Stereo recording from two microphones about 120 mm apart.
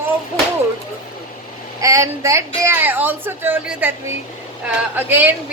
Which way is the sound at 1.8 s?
25° right (ahead or behind).